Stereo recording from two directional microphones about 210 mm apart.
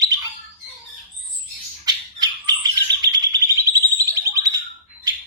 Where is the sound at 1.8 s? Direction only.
20° right (ahead or behind).